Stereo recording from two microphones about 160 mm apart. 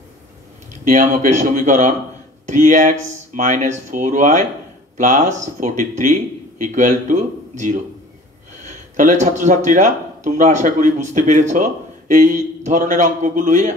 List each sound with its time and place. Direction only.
0.8 s speech: 50° right (ahead or behind)